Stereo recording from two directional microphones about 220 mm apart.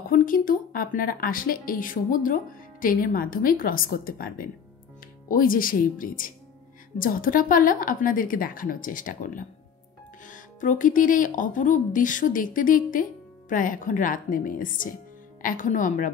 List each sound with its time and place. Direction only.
0.0 s speech: 40° left (ahead or behind)